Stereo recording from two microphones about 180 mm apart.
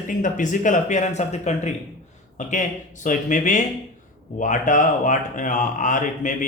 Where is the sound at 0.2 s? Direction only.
45° left (ahead or behind).